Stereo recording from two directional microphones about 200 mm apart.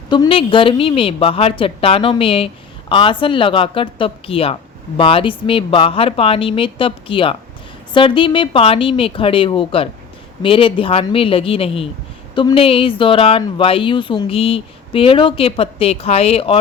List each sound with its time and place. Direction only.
0.1 s speech: 25° left (ahead or behind)